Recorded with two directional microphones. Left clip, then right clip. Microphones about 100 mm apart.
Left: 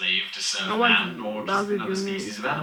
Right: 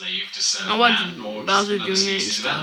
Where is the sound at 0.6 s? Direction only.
35° right (ahead or behind).